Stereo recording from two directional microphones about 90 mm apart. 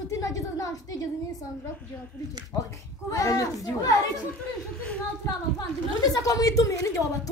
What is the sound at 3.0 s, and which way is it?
Speech, 40° left (ahead or behind).